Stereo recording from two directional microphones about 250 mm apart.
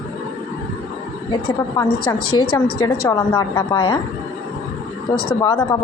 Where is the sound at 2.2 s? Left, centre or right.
Left.